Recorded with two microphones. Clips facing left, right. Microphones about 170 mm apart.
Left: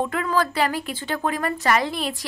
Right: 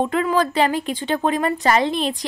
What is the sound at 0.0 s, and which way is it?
A woman's voice, 25° right (ahead or behind).